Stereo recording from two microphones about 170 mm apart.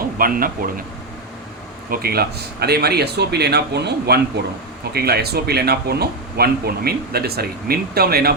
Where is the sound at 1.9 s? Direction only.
65° right (ahead or behind).